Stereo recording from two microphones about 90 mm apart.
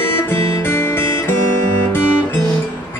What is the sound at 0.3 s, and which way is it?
Music, 25° left (ahead or behind).